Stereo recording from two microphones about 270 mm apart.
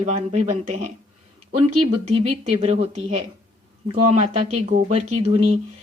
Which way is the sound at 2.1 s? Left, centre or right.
Right.